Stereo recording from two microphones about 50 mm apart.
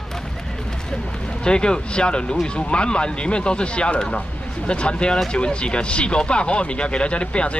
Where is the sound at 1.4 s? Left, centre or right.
Centre.